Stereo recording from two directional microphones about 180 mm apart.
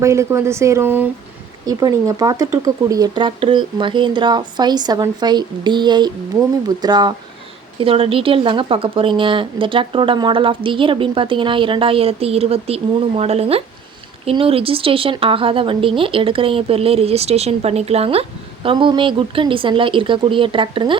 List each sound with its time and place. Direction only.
0.0 s a woman's voice: 15° right (ahead or behind)